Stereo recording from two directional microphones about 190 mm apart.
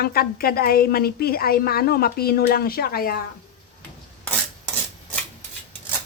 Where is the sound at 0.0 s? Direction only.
50° left (ahead or behind).